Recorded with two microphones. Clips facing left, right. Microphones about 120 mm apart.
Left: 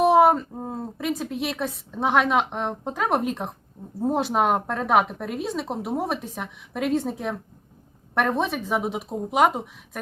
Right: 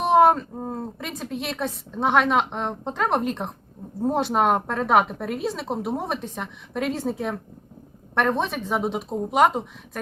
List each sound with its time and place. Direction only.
0.0 s a woman's voice: 5° left (ahead or behind)